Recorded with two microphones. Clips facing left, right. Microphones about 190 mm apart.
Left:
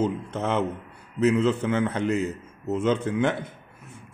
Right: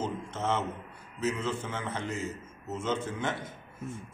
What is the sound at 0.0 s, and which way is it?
A man's voice, 65° left (ahead or behind).